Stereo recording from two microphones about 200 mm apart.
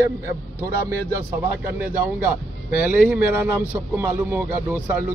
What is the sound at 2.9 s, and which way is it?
Speech, 5° right (ahead or behind).